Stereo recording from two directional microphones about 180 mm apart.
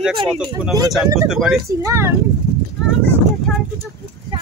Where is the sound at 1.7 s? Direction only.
15° right (ahead or behind).